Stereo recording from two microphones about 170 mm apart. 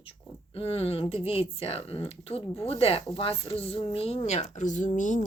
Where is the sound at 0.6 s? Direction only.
35° left (ahead or behind).